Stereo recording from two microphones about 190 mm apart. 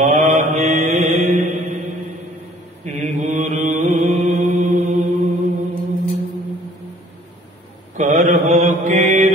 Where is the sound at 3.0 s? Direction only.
40° right (ahead or behind).